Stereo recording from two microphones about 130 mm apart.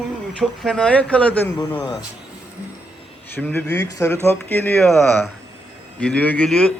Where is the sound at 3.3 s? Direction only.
15° left (ahead or behind).